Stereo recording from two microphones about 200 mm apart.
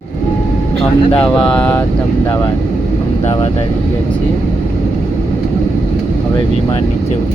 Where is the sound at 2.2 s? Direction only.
20° left (ahead or behind).